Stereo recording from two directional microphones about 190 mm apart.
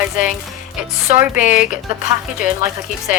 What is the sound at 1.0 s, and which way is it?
Speech, 10° right (ahead or behind).